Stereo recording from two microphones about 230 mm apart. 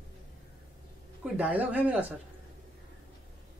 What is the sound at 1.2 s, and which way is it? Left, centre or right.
Speech, centre.